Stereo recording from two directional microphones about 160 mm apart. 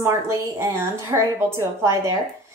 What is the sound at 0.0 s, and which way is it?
A woman's voice, 15° right (ahead or behind).